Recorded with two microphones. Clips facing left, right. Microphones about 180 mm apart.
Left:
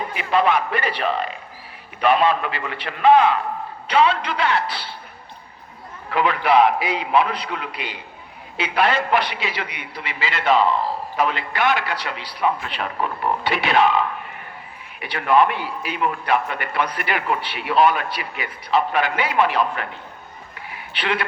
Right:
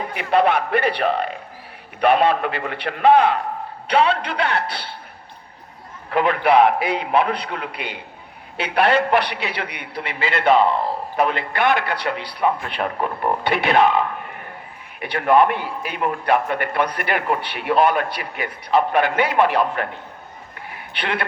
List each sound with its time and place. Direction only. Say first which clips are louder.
0.2 s a man's voice: right 2 dB; 60° right (ahead or behind)
6.1 s a man's voice: right 1 dB; 50° right (ahead or behind)
21.0 s a man's voice: left 1 dB; 55° right (ahead or behind)